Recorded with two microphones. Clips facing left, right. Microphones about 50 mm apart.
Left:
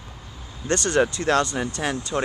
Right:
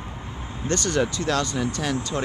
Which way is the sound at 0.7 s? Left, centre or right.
Left.